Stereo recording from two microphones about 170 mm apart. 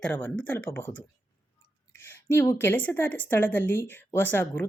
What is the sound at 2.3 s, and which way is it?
Speech, 15° left (ahead or behind).